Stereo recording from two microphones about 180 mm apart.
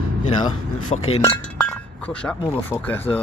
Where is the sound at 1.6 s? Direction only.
5° left (ahead or behind).